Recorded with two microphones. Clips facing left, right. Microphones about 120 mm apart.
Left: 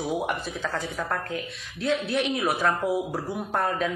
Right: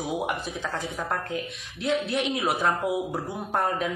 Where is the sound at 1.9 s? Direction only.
60° left (ahead or behind).